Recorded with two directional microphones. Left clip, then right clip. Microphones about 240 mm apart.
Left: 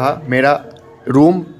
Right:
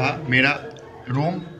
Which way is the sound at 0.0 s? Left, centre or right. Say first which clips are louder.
Left 5 dB; left.